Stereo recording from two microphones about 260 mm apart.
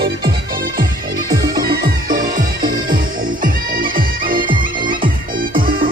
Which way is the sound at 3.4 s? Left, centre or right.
Right.